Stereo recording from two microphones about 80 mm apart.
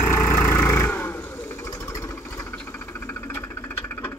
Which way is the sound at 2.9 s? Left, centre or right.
Left.